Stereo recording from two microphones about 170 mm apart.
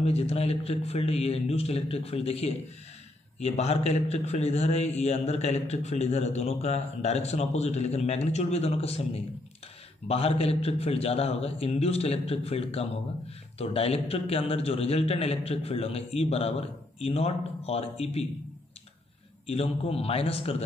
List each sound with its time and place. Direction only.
0.0 s a man's voice: 40° left (ahead or behind)
19.4 s a man's voice: 35° left (ahead or behind)